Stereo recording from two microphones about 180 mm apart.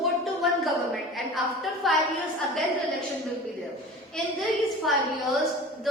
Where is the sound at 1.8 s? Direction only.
Centre (ahead or behind).